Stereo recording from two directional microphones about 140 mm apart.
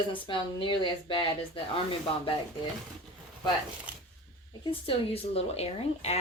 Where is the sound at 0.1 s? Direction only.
35° left (ahead or behind).